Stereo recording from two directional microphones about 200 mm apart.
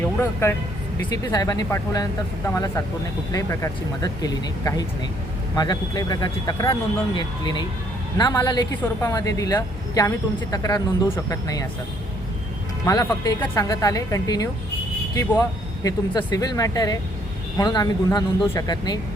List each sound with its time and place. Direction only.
0.0 s a woman's voice: 10° left (ahead or behind)
12.8 s a woman's voice: 15° left (ahead or behind)